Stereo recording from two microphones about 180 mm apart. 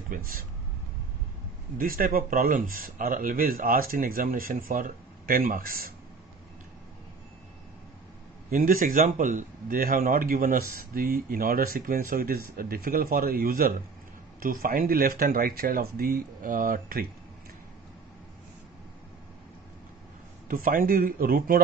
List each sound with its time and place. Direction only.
0.1 s speech: 50° right (ahead or behind)
1.8 s speech: 50° right (ahead or behind)
8.5 s speech: 50° right (ahead or behind)
20.4 s speech: 50° right (ahead or behind)